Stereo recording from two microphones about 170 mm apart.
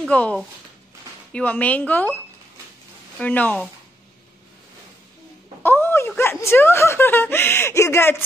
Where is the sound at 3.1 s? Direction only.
10° left (ahead or behind).